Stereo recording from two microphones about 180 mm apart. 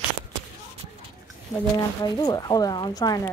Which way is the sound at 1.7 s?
20° left (ahead or behind).